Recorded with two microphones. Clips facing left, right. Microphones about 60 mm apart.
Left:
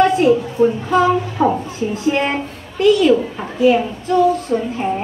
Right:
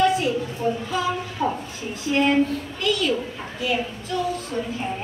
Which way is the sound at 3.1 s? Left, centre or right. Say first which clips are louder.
Left 10 dB; left.